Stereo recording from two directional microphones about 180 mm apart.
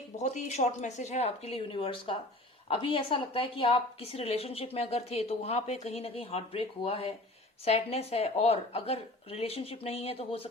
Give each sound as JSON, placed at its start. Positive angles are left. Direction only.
{"t": 0.2, "sound": "a woman's voice", "side_deg": 40}